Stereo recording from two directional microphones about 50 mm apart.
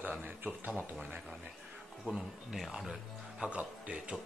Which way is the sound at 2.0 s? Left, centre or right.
Centre.